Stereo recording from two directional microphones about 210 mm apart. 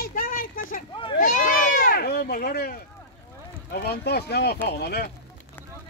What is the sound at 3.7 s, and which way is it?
Speech, 50° left (ahead or behind).